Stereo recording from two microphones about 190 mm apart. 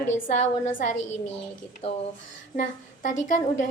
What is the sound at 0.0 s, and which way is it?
Speech, 40° left (ahead or behind).